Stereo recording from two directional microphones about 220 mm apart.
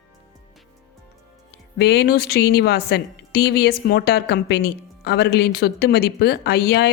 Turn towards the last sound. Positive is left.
turn(degrees=50)  # may be behind; listen again after turning